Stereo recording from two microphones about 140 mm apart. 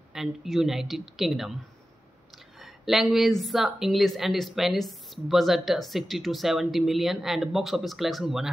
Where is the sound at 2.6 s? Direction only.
Centre (ahead or behind).